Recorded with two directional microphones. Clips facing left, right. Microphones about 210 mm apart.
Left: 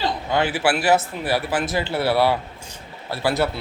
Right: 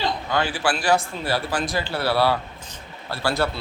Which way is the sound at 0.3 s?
20° left (ahead or behind).